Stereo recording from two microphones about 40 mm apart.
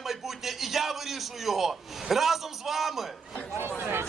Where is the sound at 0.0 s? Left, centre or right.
Centre.